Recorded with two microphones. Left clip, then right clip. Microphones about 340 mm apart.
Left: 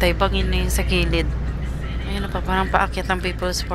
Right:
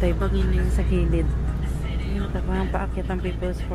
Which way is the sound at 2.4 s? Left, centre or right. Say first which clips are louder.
Left 11 dB; left.